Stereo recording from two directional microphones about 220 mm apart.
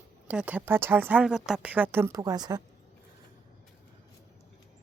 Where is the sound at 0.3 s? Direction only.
5° right (ahead or behind).